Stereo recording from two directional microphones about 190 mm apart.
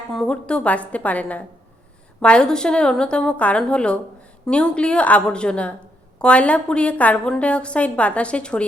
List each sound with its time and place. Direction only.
0.1 s a woman's voice: 5° left (ahead or behind)